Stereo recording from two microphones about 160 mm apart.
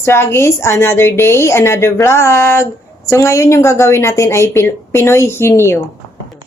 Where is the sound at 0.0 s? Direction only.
15° left (ahead or behind).